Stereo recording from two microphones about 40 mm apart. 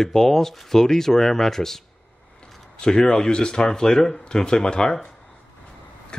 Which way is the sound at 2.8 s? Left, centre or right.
Centre.